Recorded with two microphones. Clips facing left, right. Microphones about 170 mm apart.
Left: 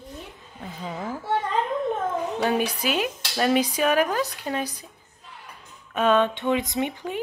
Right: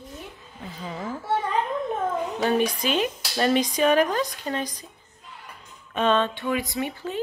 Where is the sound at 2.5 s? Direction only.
10° left (ahead or behind).